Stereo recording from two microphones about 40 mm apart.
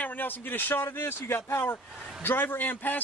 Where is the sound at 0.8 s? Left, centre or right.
Left.